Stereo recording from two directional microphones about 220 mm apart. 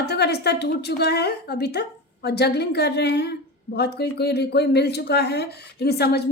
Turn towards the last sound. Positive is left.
turn(degrees=45)  # may be behind; listen again after turning